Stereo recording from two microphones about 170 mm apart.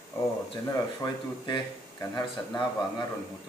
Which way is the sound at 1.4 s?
25° left (ahead or behind).